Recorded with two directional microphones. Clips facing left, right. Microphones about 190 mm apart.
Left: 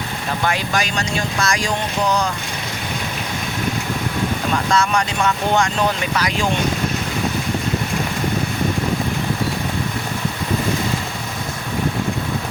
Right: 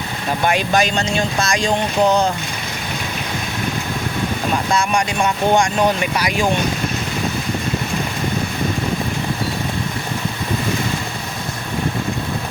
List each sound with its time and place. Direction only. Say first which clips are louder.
0.4 s speech: right 5 dB; 20° right (ahead or behind)
4.7 s speech: left 1 dB; 15° right (ahead or behind)